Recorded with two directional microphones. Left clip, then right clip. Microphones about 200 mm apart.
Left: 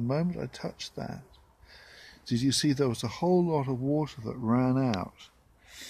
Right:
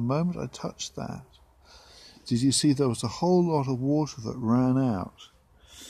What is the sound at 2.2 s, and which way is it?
Speech, 40° right (ahead or behind).